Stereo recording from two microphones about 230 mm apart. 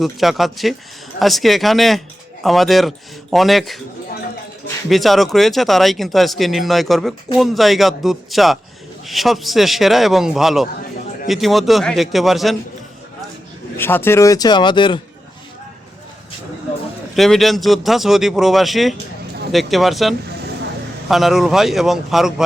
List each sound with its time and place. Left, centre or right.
0.0 s speech: centre
4.9 s speech: centre
13.7 s speech: centre
17.2 s speech: centre